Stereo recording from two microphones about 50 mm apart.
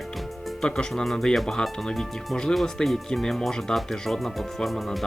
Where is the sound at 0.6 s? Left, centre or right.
Centre.